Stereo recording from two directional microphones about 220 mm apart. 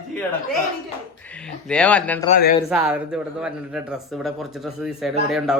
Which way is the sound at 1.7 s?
5° left (ahead or behind).